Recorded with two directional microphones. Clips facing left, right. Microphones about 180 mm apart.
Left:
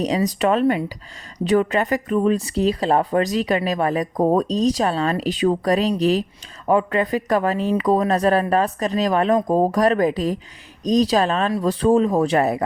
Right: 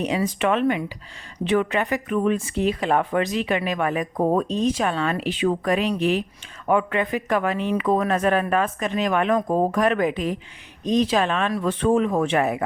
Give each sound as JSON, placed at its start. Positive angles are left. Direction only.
{"t": 0.3, "sound": "speech", "side_deg": 40}